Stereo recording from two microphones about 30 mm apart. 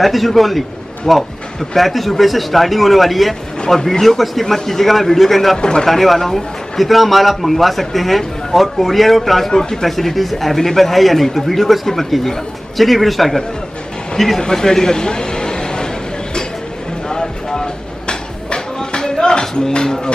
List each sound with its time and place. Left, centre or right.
0.0 s a man's voice: centre
5.6 s speech: left
5.9 s a man's voice: centre
9.5 s speech: left
9.8 s a man's voice: centre
14.5 s a sound: left
17.1 s a sound: left
19.5 s speech: left